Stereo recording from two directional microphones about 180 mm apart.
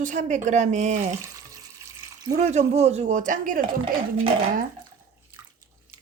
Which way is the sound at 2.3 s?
40° right (ahead or behind).